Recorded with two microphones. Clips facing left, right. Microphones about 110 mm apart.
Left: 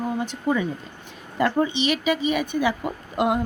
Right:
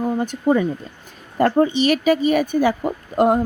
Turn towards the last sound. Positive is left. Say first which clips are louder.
# right 6 dB
turn(degrees=-40)  # may be behind; listen again after turning